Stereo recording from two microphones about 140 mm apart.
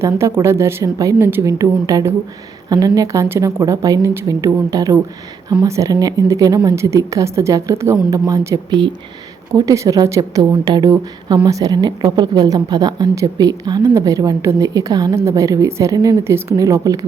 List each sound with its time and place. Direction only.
0.0 s a woman's voice: 20° right (ahead or behind)